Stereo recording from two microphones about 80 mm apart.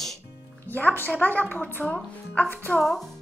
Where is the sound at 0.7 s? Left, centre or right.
Left.